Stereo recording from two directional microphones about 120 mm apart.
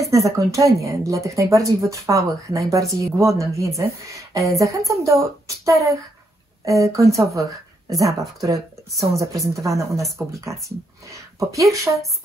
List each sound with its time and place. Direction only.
0.1 s speech: 25° right (ahead or behind)